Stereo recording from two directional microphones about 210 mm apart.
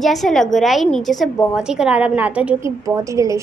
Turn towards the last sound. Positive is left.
turn(degrees=-15)  # may be behind; listen again after turning